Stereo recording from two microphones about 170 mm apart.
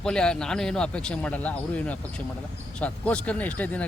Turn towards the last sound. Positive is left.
turn(degrees=10)  # may be behind; listen again after turning